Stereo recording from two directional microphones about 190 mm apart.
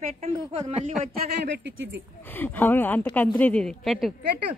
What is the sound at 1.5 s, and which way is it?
Speech, 70° right (ahead or behind).